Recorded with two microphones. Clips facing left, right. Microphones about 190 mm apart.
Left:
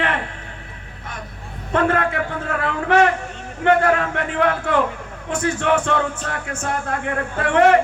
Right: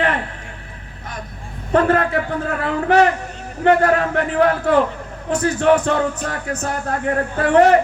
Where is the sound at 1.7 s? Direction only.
35° right (ahead or behind).